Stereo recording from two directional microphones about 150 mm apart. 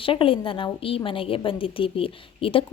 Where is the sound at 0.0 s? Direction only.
35° left (ahead or behind).